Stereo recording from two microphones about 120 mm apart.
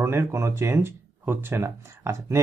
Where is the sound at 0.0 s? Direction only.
20° right (ahead or behind).